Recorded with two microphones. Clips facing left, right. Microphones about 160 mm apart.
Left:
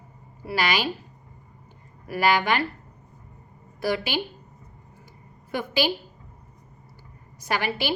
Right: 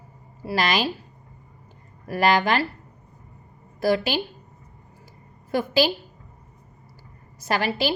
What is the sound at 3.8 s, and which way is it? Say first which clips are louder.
Speech: right 4 dB; 40° right (ahead or behind).